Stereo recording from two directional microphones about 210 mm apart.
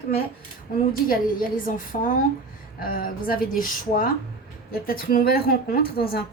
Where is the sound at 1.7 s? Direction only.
40° left (ahead or behind).